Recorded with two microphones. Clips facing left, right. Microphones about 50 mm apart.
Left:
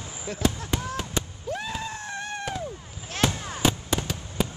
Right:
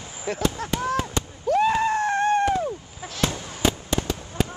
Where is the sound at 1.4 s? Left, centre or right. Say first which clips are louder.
Right 12 dB; right.